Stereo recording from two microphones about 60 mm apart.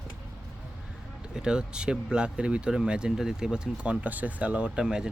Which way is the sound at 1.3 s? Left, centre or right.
Centre.